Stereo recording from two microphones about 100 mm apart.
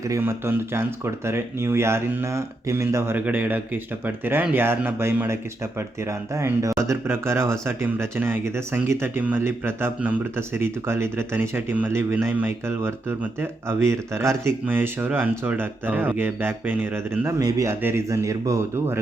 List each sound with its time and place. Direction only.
0.2 s speech: 20° right (ahead or behind)
3.2 s speech: 15° right (ahead or behind); by 18.9 s 30° right (ahead or behind)